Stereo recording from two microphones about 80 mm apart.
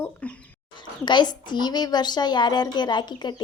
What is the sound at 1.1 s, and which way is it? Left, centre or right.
A woman's voice, left.